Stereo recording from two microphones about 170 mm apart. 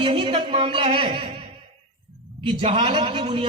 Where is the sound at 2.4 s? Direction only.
30° right (ahead or behind).